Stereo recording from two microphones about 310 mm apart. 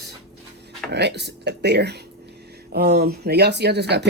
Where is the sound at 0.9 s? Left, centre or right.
Right.